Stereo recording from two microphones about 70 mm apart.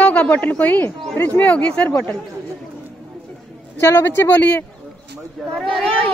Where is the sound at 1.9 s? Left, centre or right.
Left.